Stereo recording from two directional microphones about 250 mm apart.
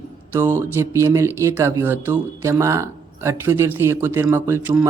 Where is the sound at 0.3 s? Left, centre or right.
Centre.